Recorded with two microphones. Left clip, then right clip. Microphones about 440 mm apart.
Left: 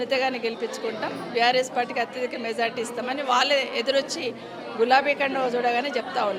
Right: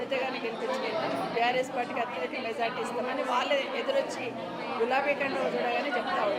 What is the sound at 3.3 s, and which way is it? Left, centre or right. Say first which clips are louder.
A woman's voice: left 8 dB; left.